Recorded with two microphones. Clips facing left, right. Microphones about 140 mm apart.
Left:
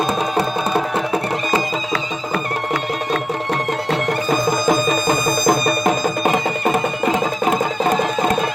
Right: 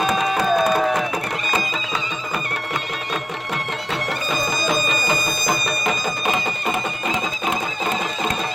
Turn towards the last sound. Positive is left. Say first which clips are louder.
# left 6 dB
turn(degrees=50)  # may be behind; listen again after turning